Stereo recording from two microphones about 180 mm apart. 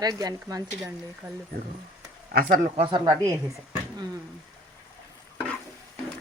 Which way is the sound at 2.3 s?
55° right (ahead or behind).